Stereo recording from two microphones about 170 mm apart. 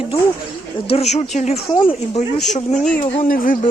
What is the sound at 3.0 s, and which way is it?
Speech, 35° left (ahead or behind).